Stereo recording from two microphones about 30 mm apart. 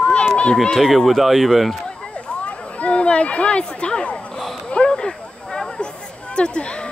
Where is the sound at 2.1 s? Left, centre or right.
Left.